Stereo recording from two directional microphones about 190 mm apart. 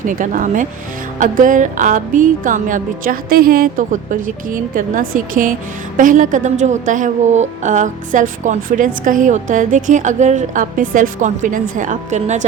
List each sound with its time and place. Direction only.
0.0 s a woman's voice: 45° right (ahead or behind)